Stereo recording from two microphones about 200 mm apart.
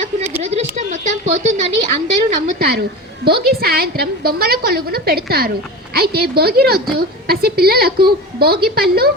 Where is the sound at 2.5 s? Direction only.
55° right (ahead or behind).